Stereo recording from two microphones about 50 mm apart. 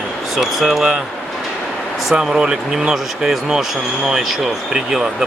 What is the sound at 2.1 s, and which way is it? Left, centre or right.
Speech, centre.